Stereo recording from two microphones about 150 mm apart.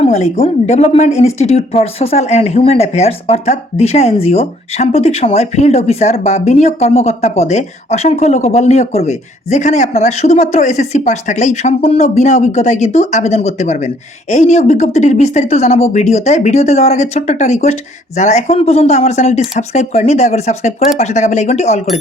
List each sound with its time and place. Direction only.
0.0 s a woman's voice: 45° left (ahead or behind)